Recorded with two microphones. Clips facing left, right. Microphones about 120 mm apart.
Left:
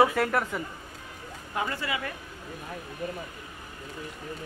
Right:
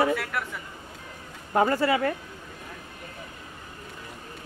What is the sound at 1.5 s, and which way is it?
Speech, 40° right (ahead or behind).